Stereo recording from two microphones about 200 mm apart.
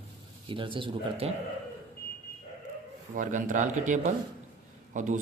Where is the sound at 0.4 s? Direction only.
25° right (ahead or behind).